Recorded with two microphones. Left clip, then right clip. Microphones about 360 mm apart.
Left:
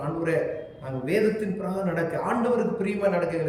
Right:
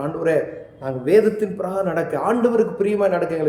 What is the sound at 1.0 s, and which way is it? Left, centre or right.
A man's voice, centre.